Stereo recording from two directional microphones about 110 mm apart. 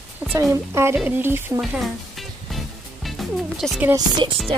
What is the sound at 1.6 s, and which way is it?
Music, centre (ahead or behind).